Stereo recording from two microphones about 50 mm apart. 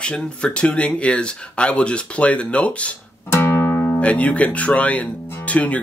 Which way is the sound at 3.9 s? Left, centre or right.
Left.